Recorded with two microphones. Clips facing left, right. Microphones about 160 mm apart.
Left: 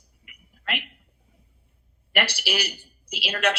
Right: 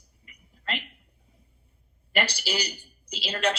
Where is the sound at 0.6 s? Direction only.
70° left (ahead or behind).